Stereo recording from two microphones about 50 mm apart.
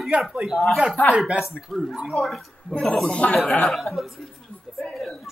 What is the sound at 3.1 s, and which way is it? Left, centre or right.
Speech, left.